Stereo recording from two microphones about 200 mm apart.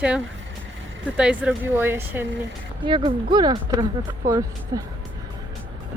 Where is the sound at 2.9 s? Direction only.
25° right (ahead or behind).